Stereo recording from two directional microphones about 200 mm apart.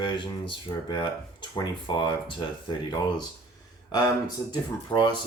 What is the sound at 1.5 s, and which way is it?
Speech, 20° left (ahead or behind).